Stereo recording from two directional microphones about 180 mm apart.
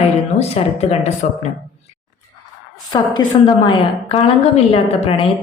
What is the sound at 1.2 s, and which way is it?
Speech, 50° left (ahead or behind).